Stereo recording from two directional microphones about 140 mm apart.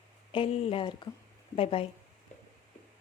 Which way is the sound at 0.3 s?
40° left (ahead or behind).